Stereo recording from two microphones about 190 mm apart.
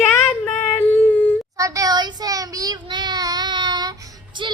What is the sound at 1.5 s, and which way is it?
Child singing, 15° right (ahead or behind).